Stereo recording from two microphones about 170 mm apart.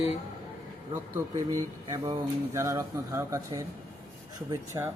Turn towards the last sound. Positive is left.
turn(degrees=-15)  # may be behind; listen again after turning